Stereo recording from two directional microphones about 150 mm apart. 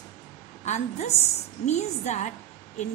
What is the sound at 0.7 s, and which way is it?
A woman's voice, 50° left (ahead or behind).